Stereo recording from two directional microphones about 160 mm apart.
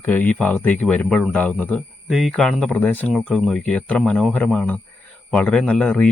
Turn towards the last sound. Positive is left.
turn(degrees=10)  # may be behind; listen again after turning